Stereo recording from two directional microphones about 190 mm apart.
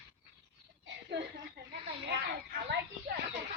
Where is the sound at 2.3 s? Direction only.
60° right (ahead or behind).